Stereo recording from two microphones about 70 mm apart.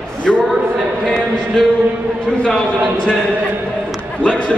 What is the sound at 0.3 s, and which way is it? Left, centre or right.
Speech, centre.